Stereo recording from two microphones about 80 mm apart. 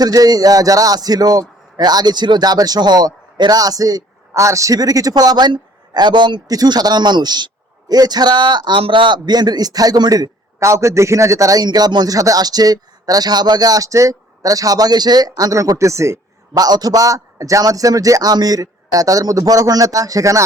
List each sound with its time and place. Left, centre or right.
0.0 s a man's voice: right
6.5 s a man's voice: right
10.6 s a man's voice: right
11.6 s speech: right
16.6 s speech: right